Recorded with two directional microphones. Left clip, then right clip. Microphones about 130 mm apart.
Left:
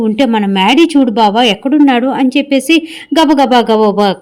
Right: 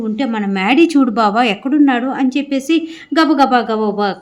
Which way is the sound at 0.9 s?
20° left (ahead or behind).